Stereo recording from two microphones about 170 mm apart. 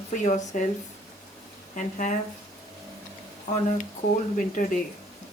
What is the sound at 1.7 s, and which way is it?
Speech, 45° left (ahead or behind).